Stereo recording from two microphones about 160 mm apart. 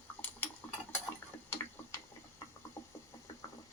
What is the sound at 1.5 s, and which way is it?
Tick-tock, 15° left (ahead or behind).